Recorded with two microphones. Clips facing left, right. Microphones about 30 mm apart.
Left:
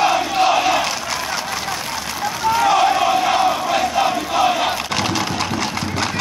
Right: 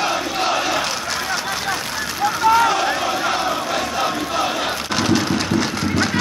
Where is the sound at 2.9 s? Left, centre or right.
Centre.